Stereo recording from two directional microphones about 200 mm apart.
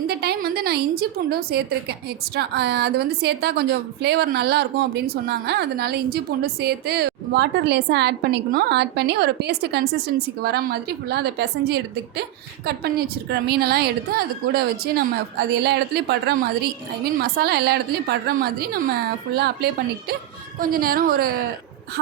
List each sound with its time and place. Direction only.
0.1 s a woman's voice: 55° right (ahead or behind)